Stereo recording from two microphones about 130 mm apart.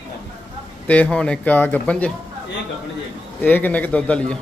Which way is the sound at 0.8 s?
10° left (ahead or behind).